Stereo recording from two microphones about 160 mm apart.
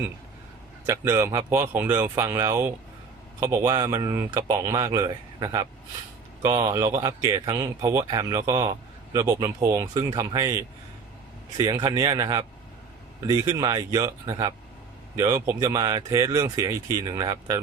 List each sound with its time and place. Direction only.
0.9 s speech: 15° right (ahead or behind)